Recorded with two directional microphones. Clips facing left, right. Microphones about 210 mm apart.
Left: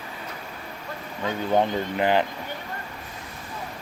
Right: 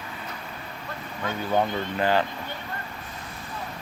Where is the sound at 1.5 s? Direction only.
15° left (ahead or behind).